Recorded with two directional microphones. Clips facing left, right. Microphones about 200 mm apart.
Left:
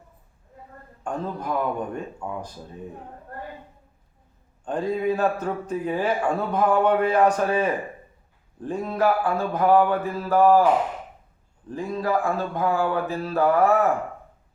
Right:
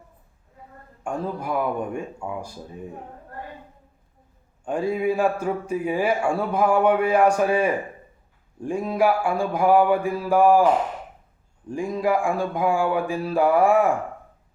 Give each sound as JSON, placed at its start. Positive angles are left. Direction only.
{"t": 1.0, "sound": "a man's voice", "side_deg": -10}
{"t": 4.6, "sound": "a man's voice", "side_deg": -10}
{"t": 11.7, "sound": "a man's voice", "side_deg": -15}